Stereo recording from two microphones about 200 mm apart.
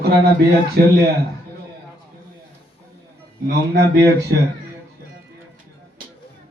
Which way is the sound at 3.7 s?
55° right (ahead or behind).